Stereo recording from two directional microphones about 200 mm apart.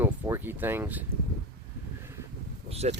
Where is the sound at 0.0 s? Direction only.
10° right (ahead or behind).